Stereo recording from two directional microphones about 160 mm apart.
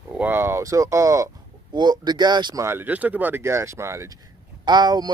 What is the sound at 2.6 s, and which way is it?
Speech, 15° right (ahead or behind).